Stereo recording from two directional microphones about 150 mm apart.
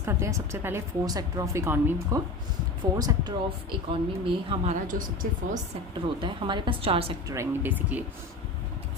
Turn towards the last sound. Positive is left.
turn(degrees=-10)  # may be behind; listen again after turning